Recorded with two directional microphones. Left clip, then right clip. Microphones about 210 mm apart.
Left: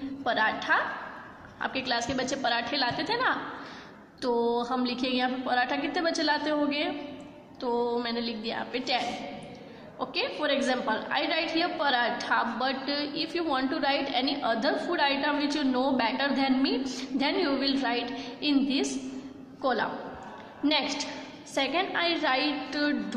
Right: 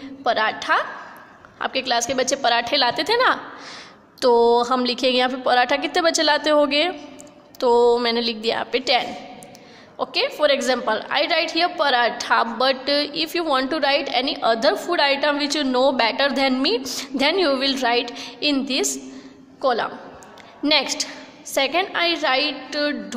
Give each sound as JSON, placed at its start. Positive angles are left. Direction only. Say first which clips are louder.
{"t": 0.2, "sound": "a woman's voice", "louder": "right 6 dB", "side_deg": -45}